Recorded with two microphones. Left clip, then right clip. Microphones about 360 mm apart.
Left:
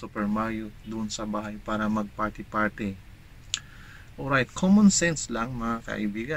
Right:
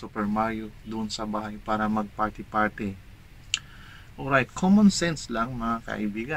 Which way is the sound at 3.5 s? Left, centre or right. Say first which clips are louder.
Right 3 dB; centre.